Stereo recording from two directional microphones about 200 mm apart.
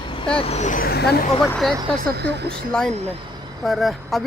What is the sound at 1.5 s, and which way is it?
Speech, 5° left (ahead or behind).